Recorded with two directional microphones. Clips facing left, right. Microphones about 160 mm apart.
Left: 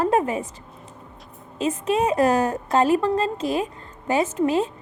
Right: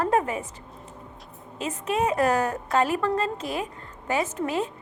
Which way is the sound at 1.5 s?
20° left (ahead or behind).